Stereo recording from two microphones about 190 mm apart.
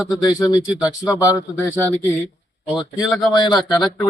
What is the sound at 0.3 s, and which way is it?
Speech, 15° left (ahead or behind).